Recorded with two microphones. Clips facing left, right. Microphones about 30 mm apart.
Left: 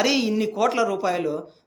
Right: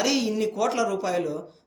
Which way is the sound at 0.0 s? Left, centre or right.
Left.